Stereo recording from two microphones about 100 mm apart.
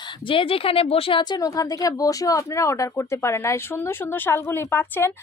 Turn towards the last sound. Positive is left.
turn(degrees=25)  # may be behind; listen again after turning